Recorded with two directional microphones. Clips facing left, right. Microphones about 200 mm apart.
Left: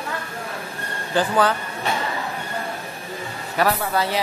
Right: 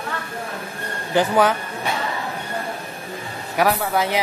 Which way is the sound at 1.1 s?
20° right (ahead or behind).